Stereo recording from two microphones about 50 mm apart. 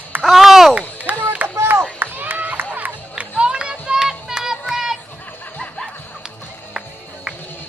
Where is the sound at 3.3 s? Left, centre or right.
Centre.